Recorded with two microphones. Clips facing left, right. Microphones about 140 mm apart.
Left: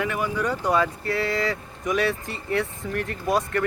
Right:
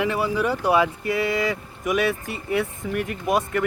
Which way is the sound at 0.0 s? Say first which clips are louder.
Right 3 dB; 25° right (ahead or behind).